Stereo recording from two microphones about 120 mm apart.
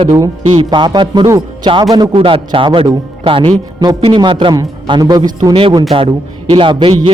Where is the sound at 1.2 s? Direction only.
30° right (ahead or behind).